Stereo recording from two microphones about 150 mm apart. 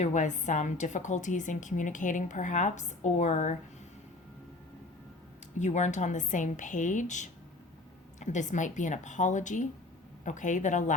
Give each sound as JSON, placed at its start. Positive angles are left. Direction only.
{"t": 0.0, "sound": "a woman's voice", "side_deg": 55}
{"t": 5.5, "sound": "a woman's voice", "side_deg": 50}